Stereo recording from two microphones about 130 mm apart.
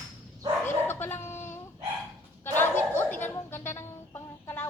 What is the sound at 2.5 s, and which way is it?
Music, 15° left (ahead or behind).